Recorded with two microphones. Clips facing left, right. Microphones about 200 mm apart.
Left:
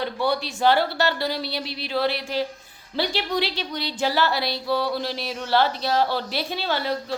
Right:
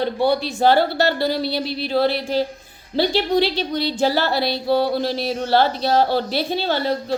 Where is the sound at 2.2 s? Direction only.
30° right (ahead or behind).